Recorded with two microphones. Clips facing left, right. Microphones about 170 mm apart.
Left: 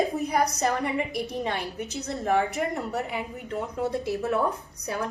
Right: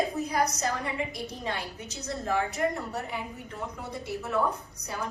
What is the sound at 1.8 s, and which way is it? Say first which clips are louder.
A woman's voice: left 5 dB; 60° left (ahead or behind).